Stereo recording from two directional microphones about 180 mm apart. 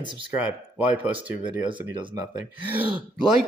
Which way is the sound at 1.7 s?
25° right (ahead or behind).